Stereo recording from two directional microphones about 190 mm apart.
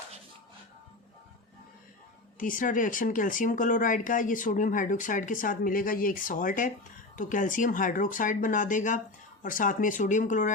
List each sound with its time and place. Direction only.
2.4 s speech: 45° left (ahead or behind)